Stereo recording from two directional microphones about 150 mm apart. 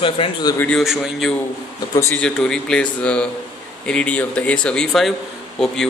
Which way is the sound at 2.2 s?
5° left (ahead or behind).